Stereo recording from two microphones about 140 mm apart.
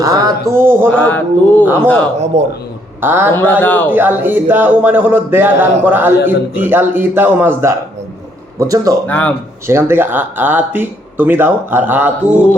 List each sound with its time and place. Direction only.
0.0 s speech: 25° right (ahead or behind)
0.9 s mantra: 10° left (ahead or behind)
1.6 s speech: 15° right (ahead or behind)
2.3 s a man's voice: 50° right (ahead or behind)
3.0 s speech: 15° right (ahead or behind)
3.3 s mantra: 10° left (ahead or behind)
3.9 s speech: 15° right (ahead or behind)
9.0 s mantra: 10° left (ahead or behind)
9.6 s speech: 15° right (ahead or behind)